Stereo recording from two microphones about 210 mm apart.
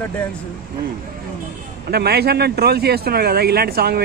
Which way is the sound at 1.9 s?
50° right (ahead or behind).